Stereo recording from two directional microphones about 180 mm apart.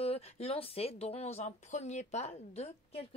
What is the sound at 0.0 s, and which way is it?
Speech, 35° left (ahead or behind).